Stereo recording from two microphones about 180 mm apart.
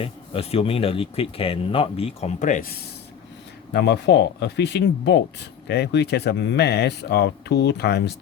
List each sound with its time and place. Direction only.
0.0 s speech: 30° left (ahead or behind)
3.7 s speech: 70° left (ahead or behind)